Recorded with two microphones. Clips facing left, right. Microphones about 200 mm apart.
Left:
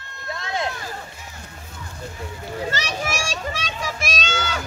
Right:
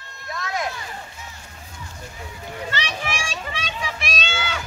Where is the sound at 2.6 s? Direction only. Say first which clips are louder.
Left 1 dB; 40° left (ahead or behind).